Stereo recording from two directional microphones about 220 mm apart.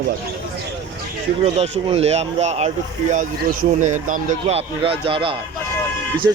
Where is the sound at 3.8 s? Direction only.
35° right (ahead or behind).